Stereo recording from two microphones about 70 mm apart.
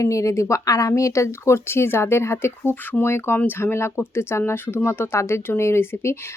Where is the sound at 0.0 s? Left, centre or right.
Left.